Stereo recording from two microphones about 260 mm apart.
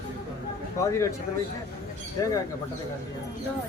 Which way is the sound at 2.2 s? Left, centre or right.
Centre.